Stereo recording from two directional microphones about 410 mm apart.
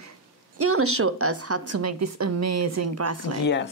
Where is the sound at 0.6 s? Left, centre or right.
Right.